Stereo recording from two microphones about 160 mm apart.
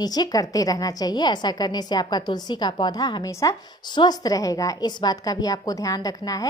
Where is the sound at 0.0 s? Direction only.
25° left (ahead or behind).